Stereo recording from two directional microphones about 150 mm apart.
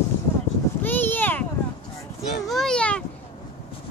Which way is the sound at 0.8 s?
15° left (ahead or behind).